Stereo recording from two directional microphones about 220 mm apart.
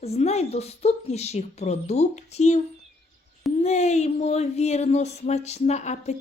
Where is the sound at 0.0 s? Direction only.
30° left (ahead or behind).